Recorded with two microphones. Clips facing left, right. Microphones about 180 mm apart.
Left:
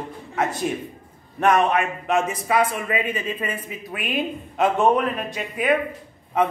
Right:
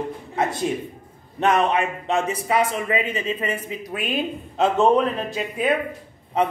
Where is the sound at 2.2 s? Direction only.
25° right (ahead or behind).